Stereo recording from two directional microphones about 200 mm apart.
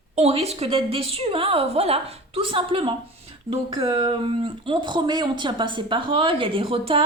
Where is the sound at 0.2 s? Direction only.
30° right (ahead or behind).